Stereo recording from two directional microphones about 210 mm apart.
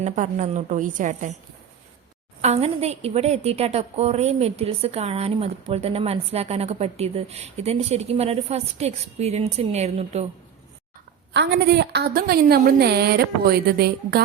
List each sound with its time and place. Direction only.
0.0 s a woman's voice: 35° right (ahead or behind)
2.4 s a woman's voice: 30° right (ahead or behind)
11.3 s a woman's voice: 55° right (ahead or behind)